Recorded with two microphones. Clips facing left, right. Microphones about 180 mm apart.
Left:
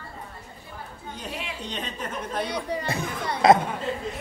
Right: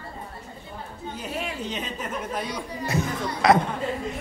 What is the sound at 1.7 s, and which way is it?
Speech, 10° right (ahead or behind).